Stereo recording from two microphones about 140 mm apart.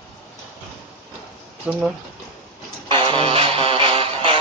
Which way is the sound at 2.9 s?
35° right (ahead or behind).